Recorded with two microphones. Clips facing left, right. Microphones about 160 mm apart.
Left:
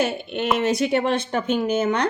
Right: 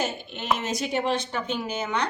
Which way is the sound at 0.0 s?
65° left (ahead or behind).